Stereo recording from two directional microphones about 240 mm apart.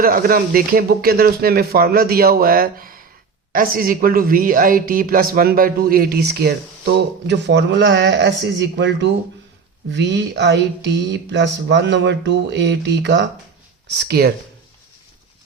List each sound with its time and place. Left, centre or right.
0.0 s a man's voice: right